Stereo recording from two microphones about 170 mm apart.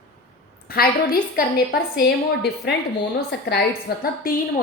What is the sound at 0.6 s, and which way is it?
A woman's voice, 60° left (ahead or behind).